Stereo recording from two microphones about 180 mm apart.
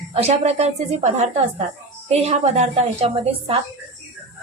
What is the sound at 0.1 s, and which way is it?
A woman's voice, 35° right (ahead or behind).